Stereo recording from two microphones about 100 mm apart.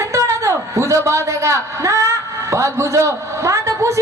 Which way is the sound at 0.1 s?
30° right (ahead or behind).